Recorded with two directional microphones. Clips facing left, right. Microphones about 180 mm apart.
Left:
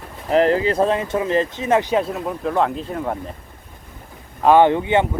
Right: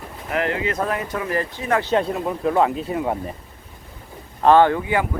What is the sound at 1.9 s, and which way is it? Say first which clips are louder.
Speech: even; centre (ahead or behind).